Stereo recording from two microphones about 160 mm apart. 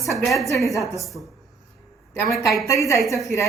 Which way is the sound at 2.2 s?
Centre (ahead or behind).